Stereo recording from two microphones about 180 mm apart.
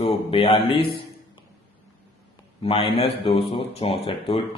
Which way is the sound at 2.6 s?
30° left (ahead or behind).